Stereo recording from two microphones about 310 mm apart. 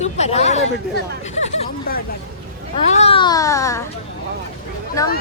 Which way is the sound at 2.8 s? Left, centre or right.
Left.